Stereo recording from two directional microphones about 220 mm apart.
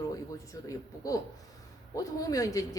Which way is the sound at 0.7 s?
15° left (ahead or behind).